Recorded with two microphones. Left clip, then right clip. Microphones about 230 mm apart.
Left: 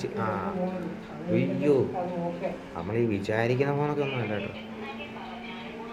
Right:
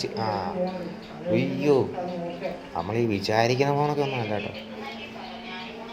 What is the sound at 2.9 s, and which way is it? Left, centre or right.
Speech, centre.